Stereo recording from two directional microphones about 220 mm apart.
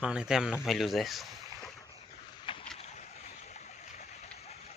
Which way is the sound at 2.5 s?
25° left (ahead or behind).